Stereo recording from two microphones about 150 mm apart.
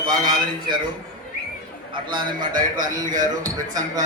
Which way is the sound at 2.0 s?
30° right (ahead or behind).